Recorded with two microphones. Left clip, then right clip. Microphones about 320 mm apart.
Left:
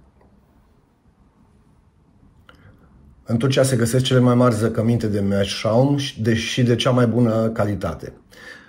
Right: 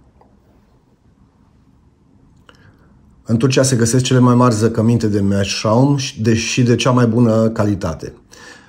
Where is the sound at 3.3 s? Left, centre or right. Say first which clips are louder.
Right 3 dB; centre.